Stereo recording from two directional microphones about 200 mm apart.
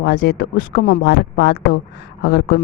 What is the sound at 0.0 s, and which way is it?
Speech, 55° left (ahead or behind).